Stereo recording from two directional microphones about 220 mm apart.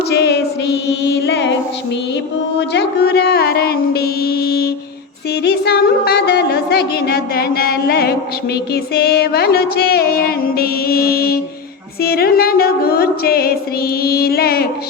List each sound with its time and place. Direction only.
0.1 s music: 50° left (ahead or behind)
2.6 s music: 50° left (ahead or behind)